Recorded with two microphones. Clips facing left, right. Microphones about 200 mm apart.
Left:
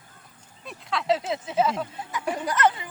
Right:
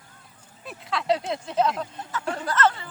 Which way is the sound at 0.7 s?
Centre (ahead or behind).